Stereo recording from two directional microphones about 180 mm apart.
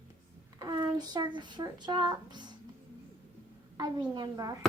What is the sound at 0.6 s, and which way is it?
Speech, 25° right (ahead or behind).